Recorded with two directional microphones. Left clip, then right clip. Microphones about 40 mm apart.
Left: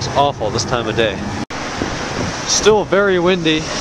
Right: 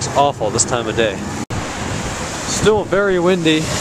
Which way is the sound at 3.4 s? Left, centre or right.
Right.